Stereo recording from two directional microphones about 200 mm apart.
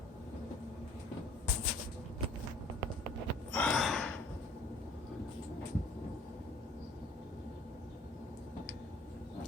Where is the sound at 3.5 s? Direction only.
5° left (ahead or behind).